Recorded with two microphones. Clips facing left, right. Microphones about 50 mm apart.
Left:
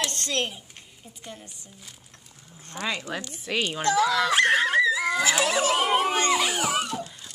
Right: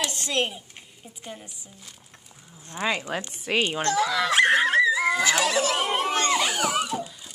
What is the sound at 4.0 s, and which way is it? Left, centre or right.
Dog, centre.